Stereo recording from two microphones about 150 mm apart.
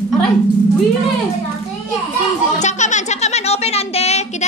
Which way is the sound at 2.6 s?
50° left (ahead or behind).